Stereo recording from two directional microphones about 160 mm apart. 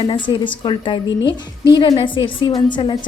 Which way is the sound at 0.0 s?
30° left (ahead or behind).